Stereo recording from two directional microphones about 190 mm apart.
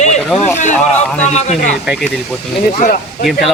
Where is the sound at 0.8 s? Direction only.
5° left (ahead or behind).